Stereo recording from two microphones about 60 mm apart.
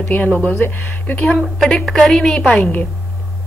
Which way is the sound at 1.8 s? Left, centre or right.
Centre.